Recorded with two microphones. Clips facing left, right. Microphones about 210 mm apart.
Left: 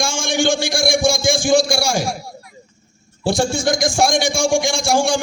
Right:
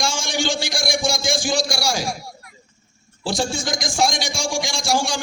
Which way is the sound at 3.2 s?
60° left (ahead or behind).